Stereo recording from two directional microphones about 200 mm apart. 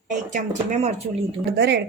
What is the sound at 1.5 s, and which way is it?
Speech, 55° right (ahead or behind).